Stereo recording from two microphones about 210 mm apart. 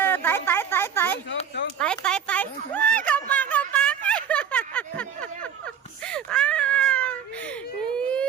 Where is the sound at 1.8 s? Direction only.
5° left (ahead or behind).